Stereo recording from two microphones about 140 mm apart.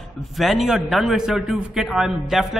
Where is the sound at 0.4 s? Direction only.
Centre (ahead or behind).